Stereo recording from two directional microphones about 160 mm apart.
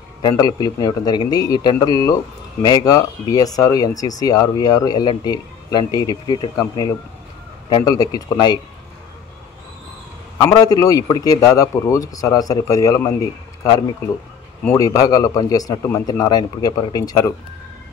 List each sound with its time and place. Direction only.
0.2 s speech: 25° left (ahead or behind)
10.3 s speech: 20° left (ahead or behind)
14.8 s speech: 20° left (ahead or behind)